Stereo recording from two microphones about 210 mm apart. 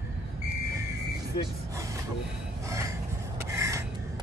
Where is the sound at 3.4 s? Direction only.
15° right (ahead or behind).